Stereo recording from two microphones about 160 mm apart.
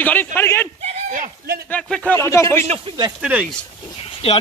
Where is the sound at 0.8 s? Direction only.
60° right (ahead or behind).